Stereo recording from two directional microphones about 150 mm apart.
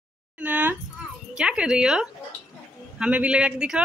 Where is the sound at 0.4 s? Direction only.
10° right (ahead or behind).